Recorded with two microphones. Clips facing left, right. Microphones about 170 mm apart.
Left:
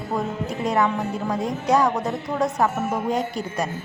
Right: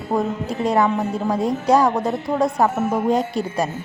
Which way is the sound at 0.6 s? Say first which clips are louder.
Right 4 dB; 30° right (ahead or behind).